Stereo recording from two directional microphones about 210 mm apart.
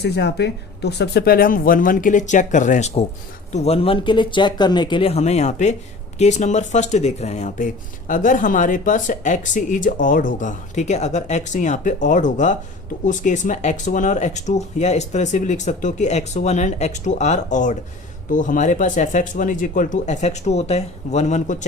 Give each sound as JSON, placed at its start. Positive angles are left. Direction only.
{"t": 0.0, "sound": "speech", "side_deg": 50}